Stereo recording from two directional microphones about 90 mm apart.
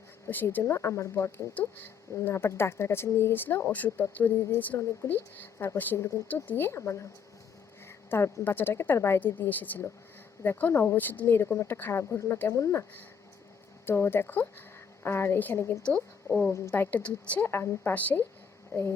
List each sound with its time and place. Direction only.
0.3 s speech: 20° left (ahead or behind)
1.5 s speech: 20° left (ahead or behind); by 12.8 s 35° left (ahead or behind)
13.8 s speech: 25° left (ahead or behind)
15.8 s speech: 15° left (ahead or behind)
17.5 s speech: 25° left (ahead or behind)
18.7 s speech: 30° left (ahead or behind)